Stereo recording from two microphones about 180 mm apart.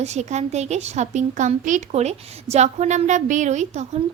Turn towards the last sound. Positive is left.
turn(degrees=-40)  # may be behind; listen again after turning